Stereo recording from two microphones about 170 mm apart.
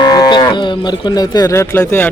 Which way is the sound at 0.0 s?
25° left (ahead or behind).